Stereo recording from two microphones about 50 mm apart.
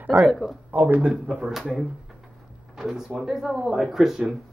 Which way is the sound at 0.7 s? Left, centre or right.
Right.